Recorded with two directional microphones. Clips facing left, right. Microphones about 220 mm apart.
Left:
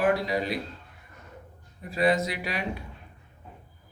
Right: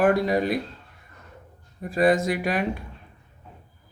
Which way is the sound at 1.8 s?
50° right (ahead or behind).